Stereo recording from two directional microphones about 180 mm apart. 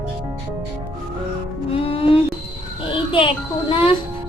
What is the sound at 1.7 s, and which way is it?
Music, 30° left (ahead or behind).